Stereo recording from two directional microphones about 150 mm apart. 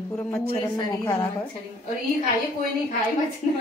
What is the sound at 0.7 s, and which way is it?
Speech, 20° left (ahead or behind).